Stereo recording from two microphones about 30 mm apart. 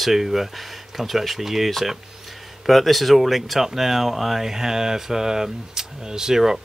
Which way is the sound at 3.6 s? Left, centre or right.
Centre.